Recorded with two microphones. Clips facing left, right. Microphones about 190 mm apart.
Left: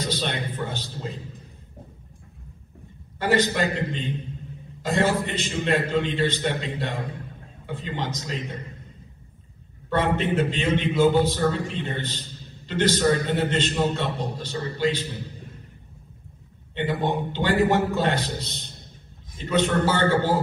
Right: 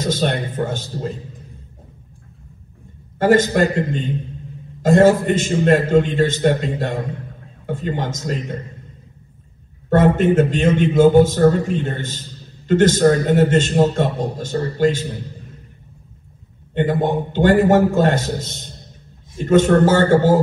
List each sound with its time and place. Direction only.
0.0 s a man's voice: 45° right (ahead or behind)
3.2 s a man's voice: 45° right (ahead or behind)
9.8 s a man's voice: 45° right (ahead or behind)
16.7 s a man's voice: 45° right (ahead or behind)